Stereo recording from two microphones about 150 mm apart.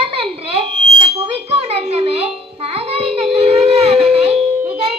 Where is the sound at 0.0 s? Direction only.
40° right (ahead or behind).